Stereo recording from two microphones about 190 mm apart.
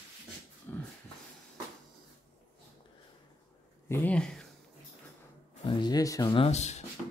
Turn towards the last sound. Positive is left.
turn(degrees=35)  # may be behind; listen again after turning